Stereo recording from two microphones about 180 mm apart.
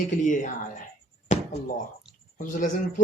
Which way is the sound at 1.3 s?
40° left (ahead or behind).